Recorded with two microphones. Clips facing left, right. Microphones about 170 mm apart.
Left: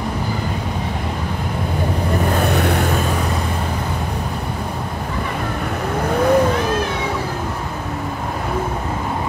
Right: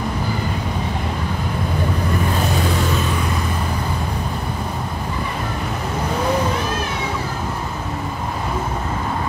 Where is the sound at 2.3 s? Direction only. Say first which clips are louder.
Left 3 dB; 65° left (ahead or behind).